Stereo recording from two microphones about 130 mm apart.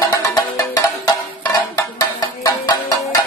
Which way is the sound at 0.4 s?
30° left (ahead or behind).